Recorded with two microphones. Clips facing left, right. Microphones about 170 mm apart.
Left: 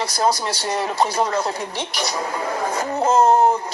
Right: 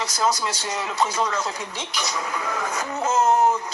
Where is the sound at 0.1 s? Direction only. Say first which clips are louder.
Left 3 dB; 35° left (ahead or behind).